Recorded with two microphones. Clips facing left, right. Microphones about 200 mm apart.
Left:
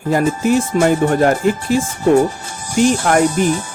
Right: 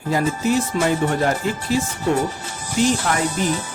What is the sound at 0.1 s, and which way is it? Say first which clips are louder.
Speech: left 5 dB; 50° left (ahead or behind).